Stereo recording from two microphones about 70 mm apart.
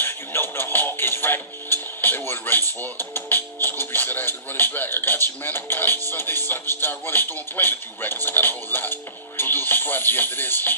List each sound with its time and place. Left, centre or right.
0.0 s music: left
9.4 s speech: left